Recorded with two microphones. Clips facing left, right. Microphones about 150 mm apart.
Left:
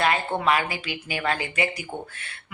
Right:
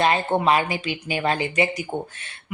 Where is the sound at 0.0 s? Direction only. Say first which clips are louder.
Right 3 dB; 25° right (ahead or behind).